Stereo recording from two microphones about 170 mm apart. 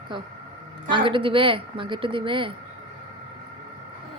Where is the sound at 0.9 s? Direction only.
30° right (ahead or behind).